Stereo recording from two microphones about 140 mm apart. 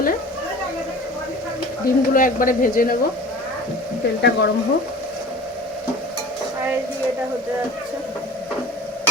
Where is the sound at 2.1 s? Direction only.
80° left.